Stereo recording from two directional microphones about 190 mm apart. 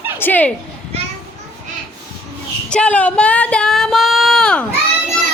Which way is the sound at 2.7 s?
5° left (ahead or behind).